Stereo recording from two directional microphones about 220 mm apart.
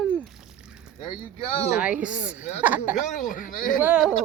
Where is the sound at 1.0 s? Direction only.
25° left (ahead or behind).